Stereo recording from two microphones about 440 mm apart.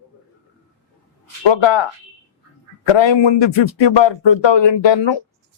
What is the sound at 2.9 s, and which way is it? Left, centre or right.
A man's voice, left.